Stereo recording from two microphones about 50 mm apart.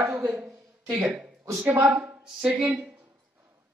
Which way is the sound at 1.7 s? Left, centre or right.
Right.